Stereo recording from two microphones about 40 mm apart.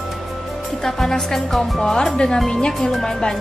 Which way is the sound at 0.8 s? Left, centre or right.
Centre.